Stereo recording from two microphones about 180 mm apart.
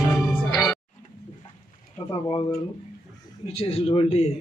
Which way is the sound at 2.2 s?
20° left (ahead or behind).